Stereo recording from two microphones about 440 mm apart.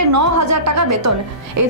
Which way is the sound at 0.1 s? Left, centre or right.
Right.